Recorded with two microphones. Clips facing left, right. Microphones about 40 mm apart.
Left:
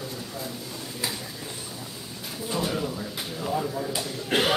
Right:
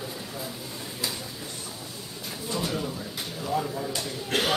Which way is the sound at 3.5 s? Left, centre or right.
Centre.